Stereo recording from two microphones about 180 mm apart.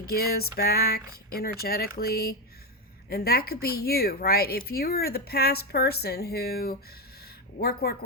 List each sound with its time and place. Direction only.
0.0 s speech: 60° left (ahead or behind)